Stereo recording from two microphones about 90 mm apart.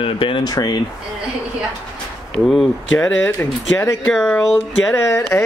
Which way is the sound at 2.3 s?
Centre (ahead or behind).